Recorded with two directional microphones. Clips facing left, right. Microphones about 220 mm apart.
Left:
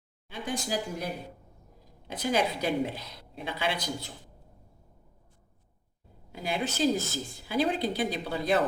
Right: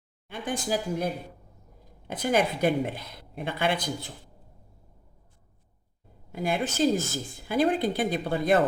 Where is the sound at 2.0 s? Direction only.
50° right (ahead or behind).